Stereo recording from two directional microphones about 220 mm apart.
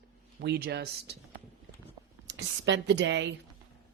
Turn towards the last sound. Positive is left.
turn(degrees=-55)  # may be behind; listen again after turning